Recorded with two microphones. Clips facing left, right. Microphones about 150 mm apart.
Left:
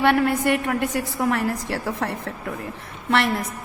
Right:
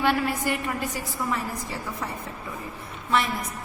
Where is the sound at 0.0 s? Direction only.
60° left (ahead or behind).